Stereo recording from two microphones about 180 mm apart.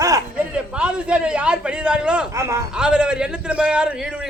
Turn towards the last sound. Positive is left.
turn(degrees=-5)  # may be behind; listen again after turning